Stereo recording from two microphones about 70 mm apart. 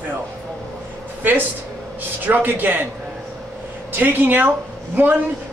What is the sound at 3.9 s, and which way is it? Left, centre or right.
A man's voice, right.